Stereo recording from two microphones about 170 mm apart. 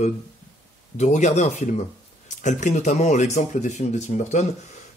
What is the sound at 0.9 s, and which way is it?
Speech, 45° left (ahead or behind).